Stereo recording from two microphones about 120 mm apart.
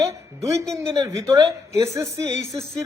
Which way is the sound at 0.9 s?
30° right (ahead or behind).